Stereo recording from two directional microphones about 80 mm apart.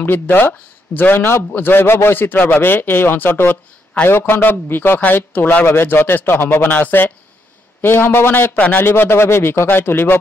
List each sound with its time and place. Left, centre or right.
0.0 s a man's voice: left